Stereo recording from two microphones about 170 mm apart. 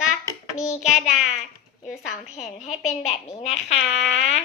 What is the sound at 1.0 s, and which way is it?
Child singing, centre (ahead or behind).